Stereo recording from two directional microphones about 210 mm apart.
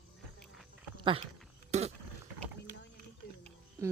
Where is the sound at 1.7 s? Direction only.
30° right (ahead or behind).